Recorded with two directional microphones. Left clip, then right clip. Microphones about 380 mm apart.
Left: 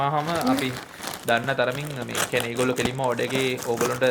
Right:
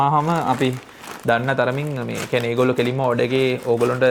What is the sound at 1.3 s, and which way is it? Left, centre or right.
Speech, right.